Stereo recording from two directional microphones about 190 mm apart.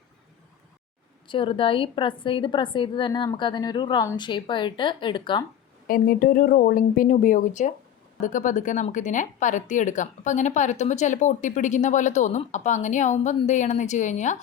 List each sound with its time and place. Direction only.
1.3 s a woman's voice: 25° left (ahead or behind)
5.9 s speech: 50° left (ahead or behind)